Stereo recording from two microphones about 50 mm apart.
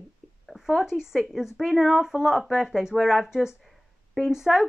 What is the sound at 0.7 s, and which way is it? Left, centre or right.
A woman's voice, centre.